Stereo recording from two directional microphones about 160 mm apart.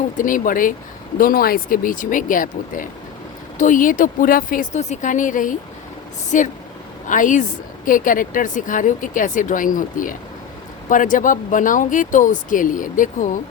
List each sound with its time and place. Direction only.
0.2 s a woman's voice: 60° left (ahead or behind)